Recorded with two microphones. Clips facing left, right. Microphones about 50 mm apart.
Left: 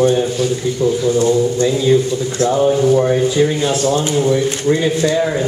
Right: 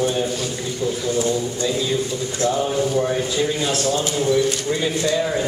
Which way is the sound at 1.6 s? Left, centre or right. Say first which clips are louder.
Left 7 dB; centre.